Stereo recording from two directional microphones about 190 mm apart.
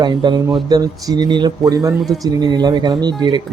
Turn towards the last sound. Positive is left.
turn(degrees=-20)  # may be behind; listen again after turning